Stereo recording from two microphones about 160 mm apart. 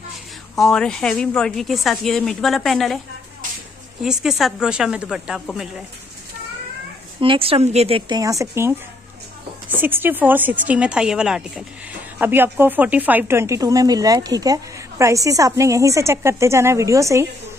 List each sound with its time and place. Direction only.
0.6 s speech: 5° left (ahead or behind)
4.0 s speech: 5° right (ahead or behind)
7.2 s a woman's voice: 35° right (ahead or behind)
8.1 s a woman's voice: 20° right (ahead or behind)